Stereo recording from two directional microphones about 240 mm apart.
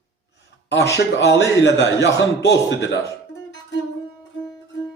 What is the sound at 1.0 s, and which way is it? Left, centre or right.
A man's voice, left.